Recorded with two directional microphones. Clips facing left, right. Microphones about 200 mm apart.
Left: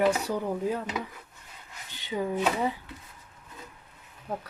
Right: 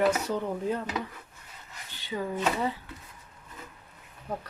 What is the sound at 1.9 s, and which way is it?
Speech, 15° left (ahead or behind).